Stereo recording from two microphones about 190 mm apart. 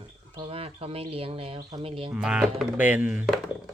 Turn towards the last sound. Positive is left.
turn(degrees=-5)  # may be behind; listen again after turning